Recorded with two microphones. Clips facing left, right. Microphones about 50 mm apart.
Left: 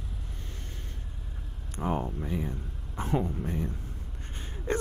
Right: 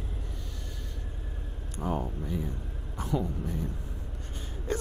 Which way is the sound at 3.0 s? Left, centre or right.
Left.